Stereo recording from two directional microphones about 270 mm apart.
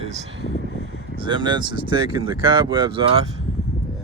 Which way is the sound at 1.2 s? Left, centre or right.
Centre.